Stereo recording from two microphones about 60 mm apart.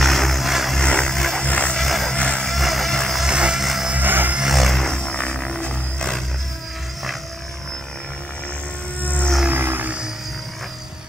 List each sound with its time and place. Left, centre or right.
0.0 s vehicle: centre
0.7 s a sound: centre
1.4 s music: left
1.8 s music: centre
2.1 s vehicle: centre
2.4 s music: centre
3.3 s a sound: centre
3.6 s vehicle: centre
4.0 s a sound: right
4.4 s a sound: centre
9.0 s music: left
9.5 s music: right